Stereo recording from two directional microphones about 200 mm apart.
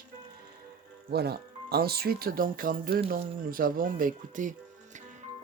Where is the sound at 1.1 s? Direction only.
50° right (ahead or behind).